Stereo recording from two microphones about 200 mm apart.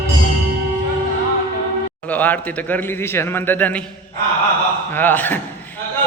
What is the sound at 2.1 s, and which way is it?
A man's voice, 10° left (ahead or behind).